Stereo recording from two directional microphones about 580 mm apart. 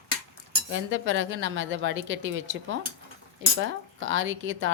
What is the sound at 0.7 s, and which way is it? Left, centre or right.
A woman's voice, centre.